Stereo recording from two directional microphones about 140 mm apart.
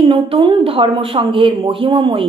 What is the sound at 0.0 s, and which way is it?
A woman's voice, 40° right (ahead or behind).